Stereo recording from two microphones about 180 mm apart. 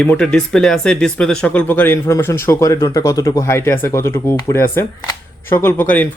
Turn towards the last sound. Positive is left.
turn(degrees=10)  # may be behind; listen again after turning